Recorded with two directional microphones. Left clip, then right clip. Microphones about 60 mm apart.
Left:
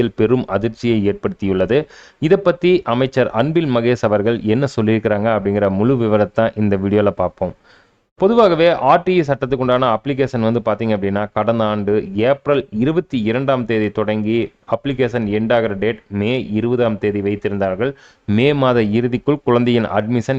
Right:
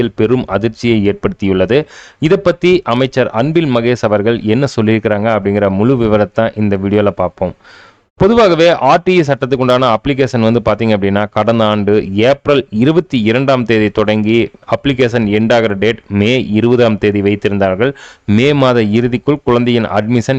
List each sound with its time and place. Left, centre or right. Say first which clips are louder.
0.0 s speech: right 3 dB; centre; by 18.3 s right
18.6 s speech: right 4 dB; centre